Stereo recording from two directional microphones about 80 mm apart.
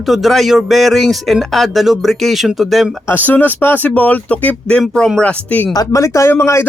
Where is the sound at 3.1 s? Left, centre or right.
Left.